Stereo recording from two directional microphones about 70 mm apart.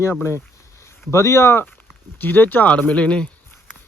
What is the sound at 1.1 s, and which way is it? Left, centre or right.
Speech, left.